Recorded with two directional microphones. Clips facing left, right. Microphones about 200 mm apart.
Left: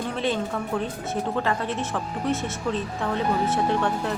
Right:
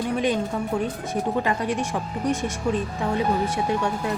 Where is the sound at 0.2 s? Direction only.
15° right (ahead or behind).